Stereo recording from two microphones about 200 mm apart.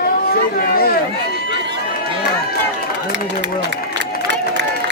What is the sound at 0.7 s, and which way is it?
Run, 50° left (ahead or behind).